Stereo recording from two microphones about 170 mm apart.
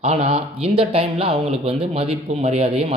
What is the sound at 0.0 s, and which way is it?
Speech, 35° right (ahead or behind).